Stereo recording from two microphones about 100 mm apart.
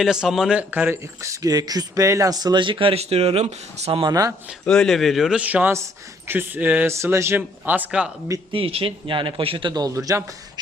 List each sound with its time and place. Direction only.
0.0 s speech: 5° right (ahead or behind)
0.7 s speech: 20° right (ahead or behind)
1.2 s speech: 35° right (ahead or behind); by 4.0 s 90° right
4.0 s speech: 35° right (ahead or behind)
4.7 s speech: 5° left (ahead or behind)
5.4 s speech: 15° right (ahead or behind)
8.5 s a man's voice: 65° right (ahead or behind); by 10.3 s 35° right (ahead or behind)